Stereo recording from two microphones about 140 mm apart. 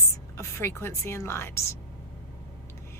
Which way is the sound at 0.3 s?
20° left (ahead or behind).